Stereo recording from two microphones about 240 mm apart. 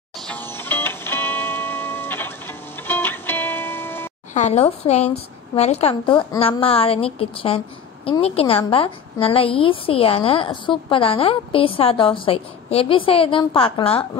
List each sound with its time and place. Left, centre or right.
0.3 s music: centre
4.3 s a woman's voice: left